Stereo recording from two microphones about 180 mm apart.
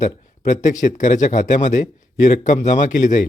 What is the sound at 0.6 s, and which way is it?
A man's voice, 45° left (ahead or behind).